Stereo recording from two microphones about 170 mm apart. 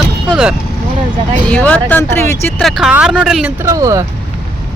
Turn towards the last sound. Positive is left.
turn(degrees=-20)  # may be behind; listen again after turning